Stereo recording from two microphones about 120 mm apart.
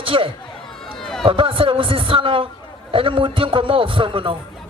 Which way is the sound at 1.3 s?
45° right (ahead or behind).